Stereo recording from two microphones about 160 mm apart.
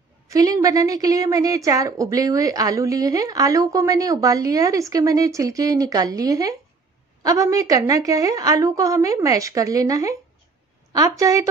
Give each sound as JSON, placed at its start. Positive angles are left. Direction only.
{"t": 0.3, "sound": "a woman's voice", "side_deg": -20}